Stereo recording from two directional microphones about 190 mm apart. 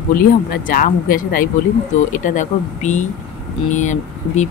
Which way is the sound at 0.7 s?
45° left (ahead or behind).